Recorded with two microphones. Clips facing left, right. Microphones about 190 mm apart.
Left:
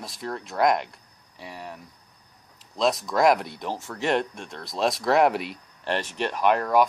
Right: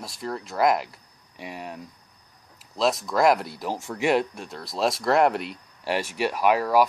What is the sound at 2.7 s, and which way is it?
Speech, centre (ahead or behind).